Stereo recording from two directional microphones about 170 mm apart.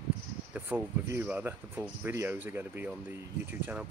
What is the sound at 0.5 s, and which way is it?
Speech, 10° right (ahead or behind).